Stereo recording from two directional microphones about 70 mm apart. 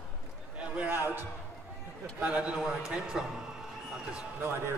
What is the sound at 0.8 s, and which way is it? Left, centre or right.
Speech, right.